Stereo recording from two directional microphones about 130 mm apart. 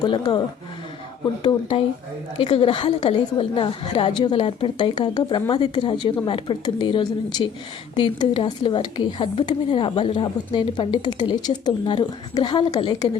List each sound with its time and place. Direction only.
0.0 s speech: 35° left (ahead or behind)